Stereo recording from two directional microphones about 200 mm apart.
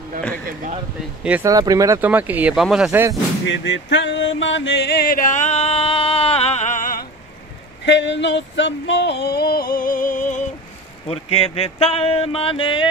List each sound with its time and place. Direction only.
1.2 s speech: 10° right (ahead or behind)
1.5 s speech: 20° right (ahead or behind)
3.4 s music: 65° left (ahead or behind); by 7.1 s 45° left (ahead or behind)
7.8 s a sound: 65° left (ahead or behind); by 10.4 s 40° left (ahead or behind)
11.1 s speech: 30° left (ahead or behind)